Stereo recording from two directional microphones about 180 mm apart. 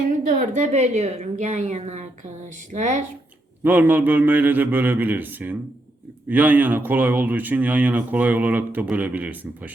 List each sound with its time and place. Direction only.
0.3 s a woman's voice: 45° right (ahead or behind)
3.6 s speech: 10° right (ahead or behind)